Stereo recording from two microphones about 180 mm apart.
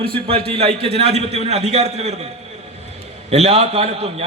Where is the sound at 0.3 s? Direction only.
35° right (ahead or behind).